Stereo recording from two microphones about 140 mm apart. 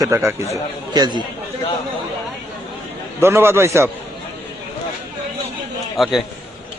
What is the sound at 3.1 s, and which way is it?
Speech, 15° right (ahead or behind).